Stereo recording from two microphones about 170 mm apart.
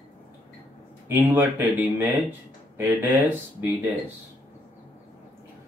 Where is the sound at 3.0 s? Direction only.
10° right (ahead or behind).